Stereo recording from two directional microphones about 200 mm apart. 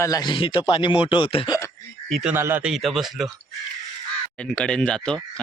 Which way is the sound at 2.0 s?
Centre (ahead or behind).